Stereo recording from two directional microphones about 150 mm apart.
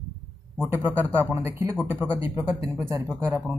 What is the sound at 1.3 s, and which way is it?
Speech, 15° right (ahead or behind).